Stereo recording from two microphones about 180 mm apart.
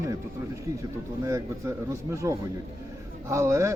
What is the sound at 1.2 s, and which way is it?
A man's voice, 15° right (ahead or behind).